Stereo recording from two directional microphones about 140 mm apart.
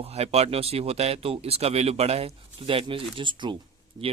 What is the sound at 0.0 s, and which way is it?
Speech, 50° right (ahead or behind).